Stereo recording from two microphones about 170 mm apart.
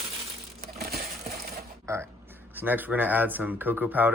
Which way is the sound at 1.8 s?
15° right (ahead or behind).